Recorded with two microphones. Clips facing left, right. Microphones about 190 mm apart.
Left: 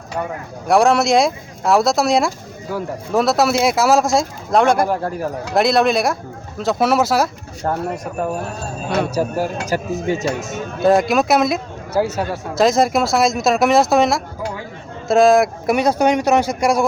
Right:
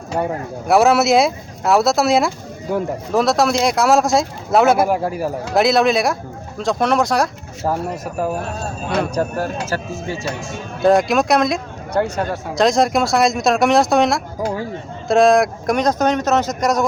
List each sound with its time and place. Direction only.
0.1 s speech: 30° right (ahead or behind)
0.7 s speech: 5° right (ahead or behind)
2.7 s speech: 20° right (ahead or behind)
3.1 s speech: centre (ahead or behind)
8.9 s speech: 5° left (ahead or behind)
10.8 s speech: centre (ahead or behind)